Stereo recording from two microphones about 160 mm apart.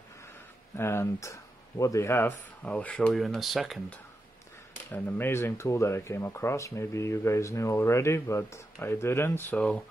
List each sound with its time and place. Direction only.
0.7 s speech: 15° left (ahead or behind); by 4.0 s centre (ahead or behind)
4.9 s speech: 10° left (ahead or behind)